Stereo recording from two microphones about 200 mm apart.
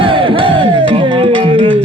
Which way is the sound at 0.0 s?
25° right (ahead or behind).